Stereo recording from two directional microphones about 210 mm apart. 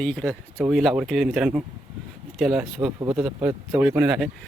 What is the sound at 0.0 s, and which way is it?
Speech, 5° left (ahead or behind).